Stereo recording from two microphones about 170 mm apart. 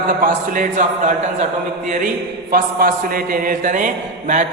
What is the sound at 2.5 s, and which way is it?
A man's voice, 60° right (ahead or behind).